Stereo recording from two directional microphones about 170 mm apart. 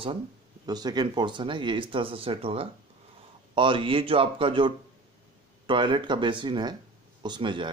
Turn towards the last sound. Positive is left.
turn(degrees=-30)  # may be behind; listen again after turning